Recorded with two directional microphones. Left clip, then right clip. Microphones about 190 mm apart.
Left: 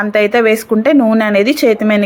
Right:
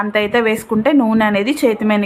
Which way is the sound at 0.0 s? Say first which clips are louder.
Left 4 dB; 15° left (ahead or behind).